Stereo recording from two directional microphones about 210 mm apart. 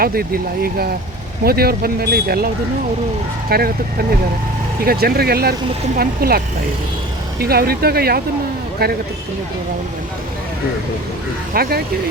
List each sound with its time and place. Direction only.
0.0 s speech: 45° right (ahead or behind)
3.5 s speech: 45° right (ahead or behind)
7.4 s speech: 45° right (ahead or behind)
11.5 s speech: 45° right (ahead or behind)